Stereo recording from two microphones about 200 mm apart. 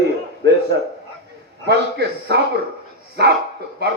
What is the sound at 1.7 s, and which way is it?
A man's voice, 55° right (ahead or behind).